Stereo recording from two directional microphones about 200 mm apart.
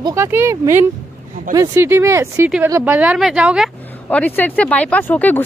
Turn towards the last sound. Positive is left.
turn(degrees=10)  # may be behind; listen again after turning